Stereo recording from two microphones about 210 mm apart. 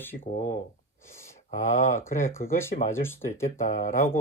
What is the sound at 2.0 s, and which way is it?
Speech, 10° left (ahead or behind).